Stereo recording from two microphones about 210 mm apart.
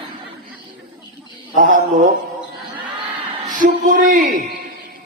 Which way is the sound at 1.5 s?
40° right (ahead or behind).